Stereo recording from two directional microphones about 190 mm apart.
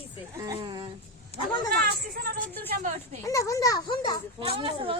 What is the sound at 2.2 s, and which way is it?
Speech, 50° right (ahead or behind).